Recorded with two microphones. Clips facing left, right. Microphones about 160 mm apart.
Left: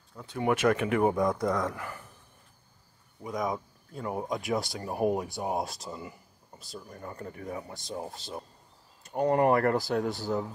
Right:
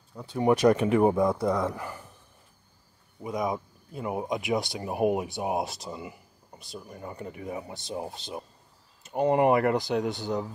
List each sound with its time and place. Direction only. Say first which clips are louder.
0.3 s speech: right 4 dB; 35° right (ahead or behind)
1.2 s speech: right 2 dB; 10° right (ahead or behind)
3.2 s speech: right 2 dB; 10° right (ahead or behind)
10.0 s speech: right 1 dB; centre (ahead or behind)